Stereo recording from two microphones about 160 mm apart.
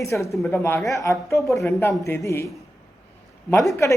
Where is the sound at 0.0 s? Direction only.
20° left (ahead or behind).